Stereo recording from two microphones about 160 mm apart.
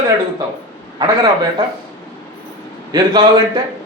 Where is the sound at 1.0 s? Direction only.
25° right (ahead or behind).